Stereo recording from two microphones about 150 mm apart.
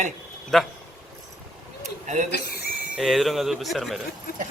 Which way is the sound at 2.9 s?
Centre (ahead or behind).